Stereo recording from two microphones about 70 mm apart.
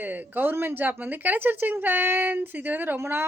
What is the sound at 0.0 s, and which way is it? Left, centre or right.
Speech, right.